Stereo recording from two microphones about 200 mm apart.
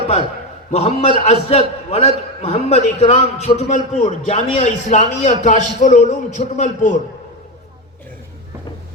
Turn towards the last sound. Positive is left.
turn(degrees=40)  # may be behind; listen again after turning